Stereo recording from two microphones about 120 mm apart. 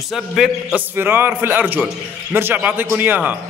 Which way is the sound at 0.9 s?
15° right (ahead or behind).